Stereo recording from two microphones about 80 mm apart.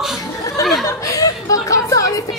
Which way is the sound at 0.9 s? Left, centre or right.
Left.